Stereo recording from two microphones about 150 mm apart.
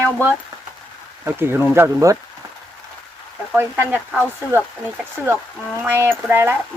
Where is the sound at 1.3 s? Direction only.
15° right (ahead or behind).